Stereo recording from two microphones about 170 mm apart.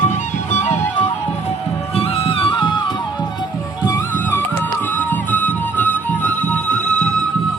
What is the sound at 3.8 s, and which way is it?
Music, 10° left (ahead or behind).